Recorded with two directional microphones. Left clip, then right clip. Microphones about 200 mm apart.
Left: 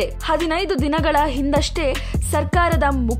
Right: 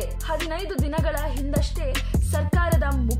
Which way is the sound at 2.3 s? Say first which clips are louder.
Left 9 dB; 40° left (ahead or behind).